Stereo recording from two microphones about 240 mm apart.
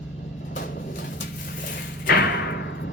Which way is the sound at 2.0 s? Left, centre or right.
Left.